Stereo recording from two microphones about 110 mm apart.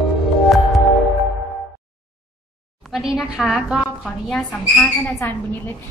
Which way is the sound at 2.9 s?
Centre (ahead or behind).